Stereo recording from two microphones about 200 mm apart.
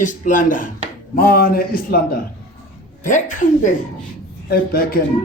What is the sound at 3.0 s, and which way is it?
A man's voice, 40° left (ahead or behind).